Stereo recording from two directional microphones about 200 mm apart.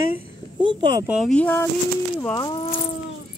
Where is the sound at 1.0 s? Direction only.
Centre (ahead or behind).